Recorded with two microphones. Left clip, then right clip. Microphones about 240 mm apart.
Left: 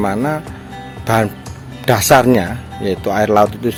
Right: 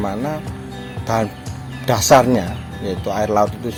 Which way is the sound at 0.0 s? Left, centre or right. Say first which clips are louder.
Left 5 dB; left.